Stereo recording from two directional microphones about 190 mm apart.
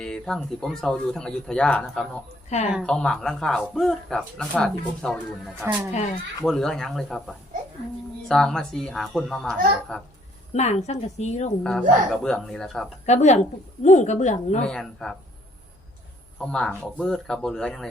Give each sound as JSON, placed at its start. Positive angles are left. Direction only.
{"t": 0.0, "sound": "speech", "side_deg": 5}
{"t": 10.5, "sound": "speech", "side_deg": 35}
{"t": 11.6, "sound": "speech", "side_deg": 5}
{"t": 13.1, "sound": "speech", "side_deg": 40}
{"t": 14.6, "sound": "speech", "side_deg": 0}
{"t": 16.4, "sound": "speech", "side_deg": 5}